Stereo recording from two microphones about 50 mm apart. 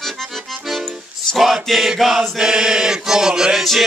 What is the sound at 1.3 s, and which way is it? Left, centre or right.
Chant, centre.